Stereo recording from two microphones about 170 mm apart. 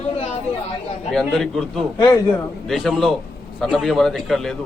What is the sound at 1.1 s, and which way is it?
Speech, 5° left (ahead or behind).